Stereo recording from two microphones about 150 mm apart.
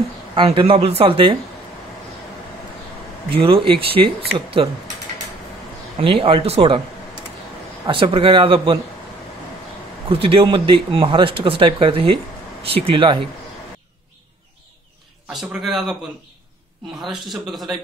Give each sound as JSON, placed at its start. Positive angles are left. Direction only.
{"t": 0.4, "sound": "speech", "side_deg": -35}
{"t": 3.3, "sound": "speech", "side_deg": -40}
{"t": 5.9, "sound": "speech", "side_deg": -40}
{"t": 7.8, "sound": "speech", "side_deg": -35}
{"t": 10.0, "sound": "speech", "side_deg": -35}
{"t": 15.2, "sound": "a man's voice", "side_deg": 0}
{"t": 17.0, "sound": "a man's voice", "side_deg": 0}